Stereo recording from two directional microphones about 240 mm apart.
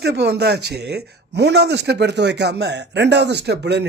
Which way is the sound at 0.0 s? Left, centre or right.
Right.